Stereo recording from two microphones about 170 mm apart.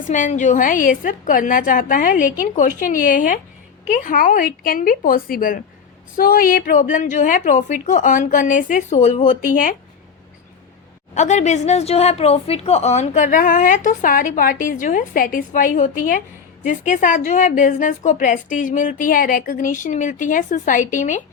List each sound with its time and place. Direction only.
0.1 s a woman's voice: 45° left (ahead or behind)
11.1 s a woman's voice: 45° left (ahead or behind)